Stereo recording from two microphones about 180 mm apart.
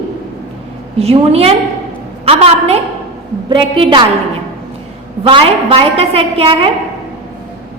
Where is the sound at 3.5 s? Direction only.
30° right (ahead or behind).